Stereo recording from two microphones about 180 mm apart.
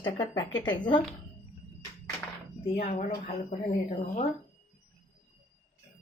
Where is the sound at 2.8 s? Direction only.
50° left (ahead or behind).